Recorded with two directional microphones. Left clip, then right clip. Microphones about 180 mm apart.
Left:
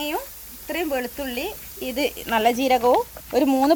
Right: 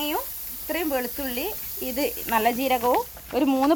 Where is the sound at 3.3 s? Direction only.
20° left (ahead or behind).